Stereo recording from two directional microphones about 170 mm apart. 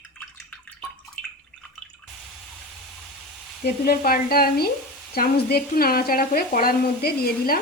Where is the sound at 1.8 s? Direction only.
5° left (ahead or behind).